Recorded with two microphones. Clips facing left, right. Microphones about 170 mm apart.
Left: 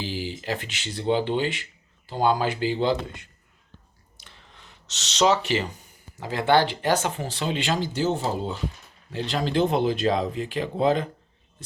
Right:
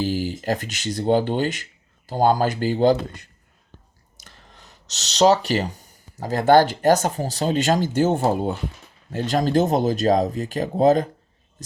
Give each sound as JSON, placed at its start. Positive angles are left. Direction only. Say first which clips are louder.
{"t": 0.0, "sound": "speech", "louder": "right 7 dB", "side_deg": -45}
{"t": 4.2, "sound": "a sound", "louder": "right 2 dB", "side_deg": -40}
{"t": 6.1, "sound": "speech", "louder": "right 5 dB", "side_deg": -40}